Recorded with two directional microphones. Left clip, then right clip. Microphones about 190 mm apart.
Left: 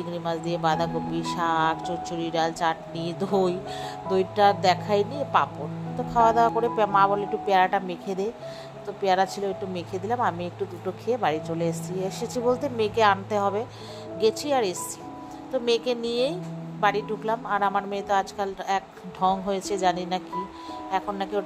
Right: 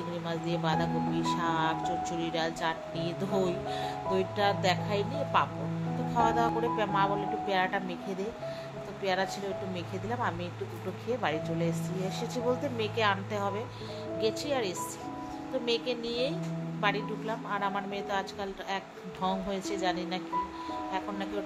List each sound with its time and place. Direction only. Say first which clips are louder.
0.2 s speech: left 8 dB; 35° left (ahead or behind)